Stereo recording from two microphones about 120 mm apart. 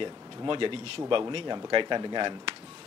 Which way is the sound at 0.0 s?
45° right (ahead or behind).